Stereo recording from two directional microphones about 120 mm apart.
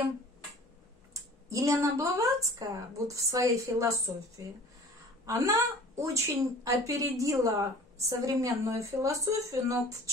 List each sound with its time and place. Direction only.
1.5 s a woman's voice: 25° right (ahead or behind)